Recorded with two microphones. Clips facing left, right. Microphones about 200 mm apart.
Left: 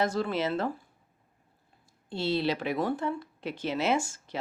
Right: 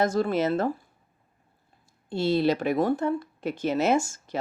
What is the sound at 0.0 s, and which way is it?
Speech, 45° right (ahead or behind).